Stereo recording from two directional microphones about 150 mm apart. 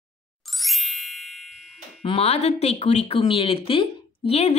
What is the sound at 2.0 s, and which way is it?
Speech, 40° left (ahead or behind).